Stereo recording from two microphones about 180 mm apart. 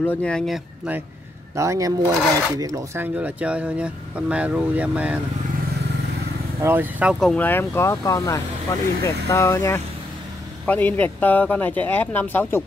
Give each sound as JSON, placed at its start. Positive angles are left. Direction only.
{"t": 0.0, "sound": "speech", "side_deg": 10}
{"t": 1.6, "sound": "speech", "side_deg": -20}
{"t": 3.2, "sound": "speech", "side_deg": -5}
{"t": 6.6, "sound": "speech", "side_deg": -10}
{"t": 7.2, "sound": "speech", "side_deg": 5}